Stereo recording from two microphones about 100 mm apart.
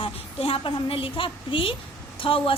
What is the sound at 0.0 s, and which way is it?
A woman's voice, 70° left (ahead or behind).